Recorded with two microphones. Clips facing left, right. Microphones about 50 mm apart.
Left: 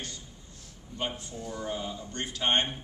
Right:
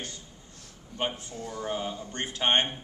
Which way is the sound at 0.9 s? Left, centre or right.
Right.